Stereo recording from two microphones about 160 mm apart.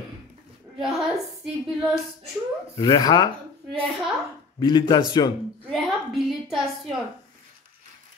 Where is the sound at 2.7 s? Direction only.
30° left (ahead or behind).